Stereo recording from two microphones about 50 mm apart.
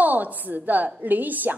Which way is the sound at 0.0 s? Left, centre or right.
Right.